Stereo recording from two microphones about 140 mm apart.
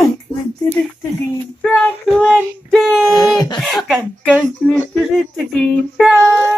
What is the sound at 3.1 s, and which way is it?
Speech, 30° left (ahead or behind).